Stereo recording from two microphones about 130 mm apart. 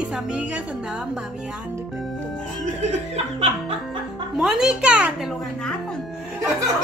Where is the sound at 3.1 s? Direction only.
50° right (ahead or behind).